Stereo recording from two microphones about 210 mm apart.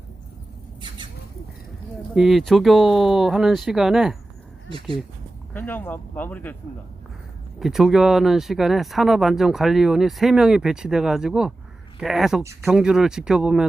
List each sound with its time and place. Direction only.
2.1 s speech: centre (ahead or behind)
5.5 s speech: 10° left (ahead or behind)
7.6 s speech: centre (ahead or behind)